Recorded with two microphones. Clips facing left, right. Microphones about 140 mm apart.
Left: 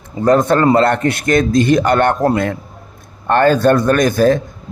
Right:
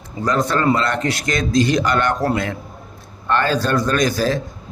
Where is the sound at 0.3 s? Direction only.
50° left (ahead or behind).